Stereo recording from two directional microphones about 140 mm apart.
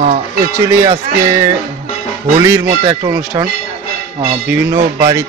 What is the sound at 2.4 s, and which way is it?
Speech, 20° right (ahead or behind).